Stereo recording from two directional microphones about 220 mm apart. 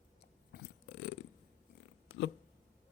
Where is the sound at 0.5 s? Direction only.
50° left (ahead or behind).